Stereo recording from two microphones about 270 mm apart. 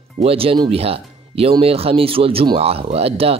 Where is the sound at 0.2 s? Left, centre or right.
Right.